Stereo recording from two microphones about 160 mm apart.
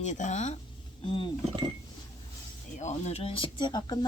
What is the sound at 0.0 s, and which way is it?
Speech, 50° left (ahead or behind).